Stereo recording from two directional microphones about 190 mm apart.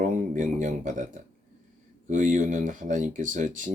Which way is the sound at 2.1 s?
40° right (ahead or behind).